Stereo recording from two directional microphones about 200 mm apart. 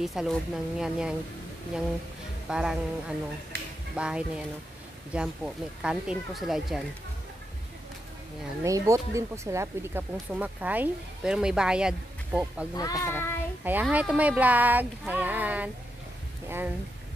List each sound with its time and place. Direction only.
0.0 s speech: centre (ahead or behind)
2.5 s speech: 5° right (ahead or behind)
3.5 s a sound: 55° right (ahead or behind)
3.9 s speech: 5° right (ahead or behind)
8.6 s speech: 15° right (ahead or behind)
12.7 s a child's voice: 15° left (ahead or behind)
13.7 s speech: 10° right (ahead or behind)